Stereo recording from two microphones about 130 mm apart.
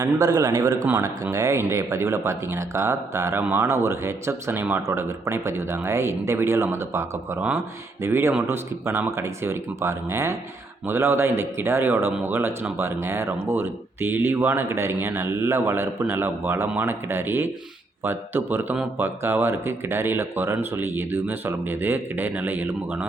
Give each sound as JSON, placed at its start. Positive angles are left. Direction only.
{"t": 0.0, "sound": "speech", "side_deg": -30}